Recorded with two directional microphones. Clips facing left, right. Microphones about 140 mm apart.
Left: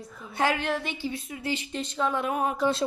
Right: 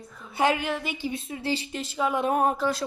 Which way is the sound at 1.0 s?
20° right (ahead or behind).